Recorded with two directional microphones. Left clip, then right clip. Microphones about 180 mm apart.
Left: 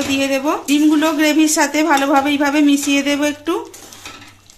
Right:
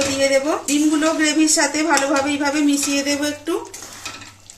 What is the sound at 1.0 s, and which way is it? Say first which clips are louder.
A woman's voice: left 3 dB; 70° left (ahead or behind).